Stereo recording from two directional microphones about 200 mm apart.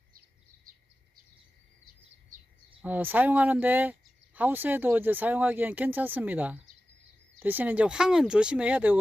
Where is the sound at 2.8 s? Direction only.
10° right (ahead or behind).